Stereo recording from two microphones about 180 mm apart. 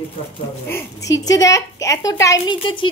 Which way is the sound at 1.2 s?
20° left (ahead or behind).